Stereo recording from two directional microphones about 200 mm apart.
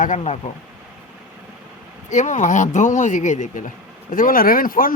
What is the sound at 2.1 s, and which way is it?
Speech, 35° left (ahead or behind).